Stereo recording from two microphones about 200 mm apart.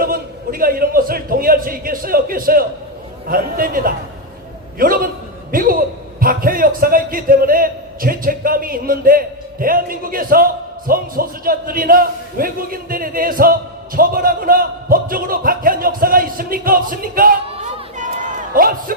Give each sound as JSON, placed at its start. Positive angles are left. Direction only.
{"t": 0.0, "sound": "a man's voice", "side_deg": -45}